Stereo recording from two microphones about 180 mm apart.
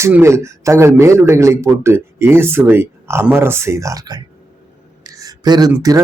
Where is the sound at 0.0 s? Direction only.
15° right (ahead or behind).